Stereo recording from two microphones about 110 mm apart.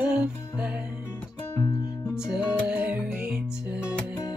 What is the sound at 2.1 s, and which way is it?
Music, 5° right (ahead or behind).